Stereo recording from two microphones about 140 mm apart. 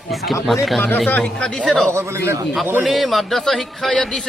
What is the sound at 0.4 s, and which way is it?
A man's voice, centre (ahead or behind).